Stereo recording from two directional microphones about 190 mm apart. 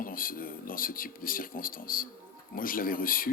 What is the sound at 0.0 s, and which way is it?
Speech, 45° left (ahead or behind).